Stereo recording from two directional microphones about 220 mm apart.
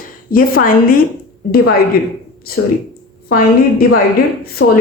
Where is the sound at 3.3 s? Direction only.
40° left (ahead or behind).